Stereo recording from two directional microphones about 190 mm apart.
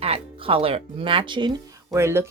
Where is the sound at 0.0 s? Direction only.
30° right (ahead or behind).